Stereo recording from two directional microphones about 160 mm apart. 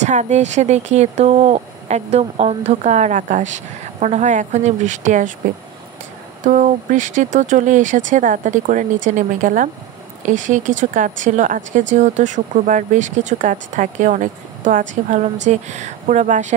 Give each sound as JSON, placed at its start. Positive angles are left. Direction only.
{"t": 0.0, "sound": "speech", "side_deg": -45}
{"t": 6.4, "sound": "speech", "side_deg": -50}